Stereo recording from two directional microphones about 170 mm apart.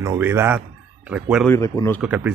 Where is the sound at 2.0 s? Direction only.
10° right (ahead or behind).